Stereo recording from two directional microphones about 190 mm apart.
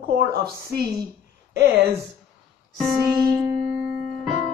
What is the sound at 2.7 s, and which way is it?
Music, centre (ahead or behind).